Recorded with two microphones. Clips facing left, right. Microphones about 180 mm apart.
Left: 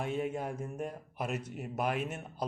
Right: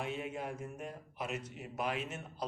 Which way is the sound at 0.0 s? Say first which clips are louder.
Left 5 dB; 45° left (ahead or behind).